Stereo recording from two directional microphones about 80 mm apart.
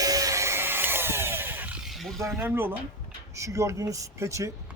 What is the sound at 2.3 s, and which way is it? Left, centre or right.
Speech, right.